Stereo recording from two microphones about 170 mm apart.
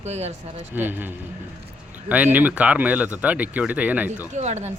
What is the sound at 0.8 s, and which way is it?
Speech, 10° right (ahead or behind).